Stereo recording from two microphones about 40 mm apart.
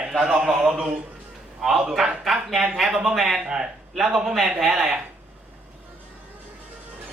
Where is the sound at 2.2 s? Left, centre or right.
Centre.